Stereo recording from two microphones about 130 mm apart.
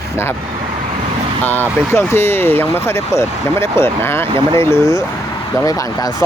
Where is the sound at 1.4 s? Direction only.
15° left (ahead or behind).